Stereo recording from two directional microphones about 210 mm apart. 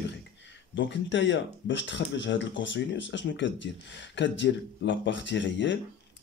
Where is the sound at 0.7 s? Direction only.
60° left (ahead or behind).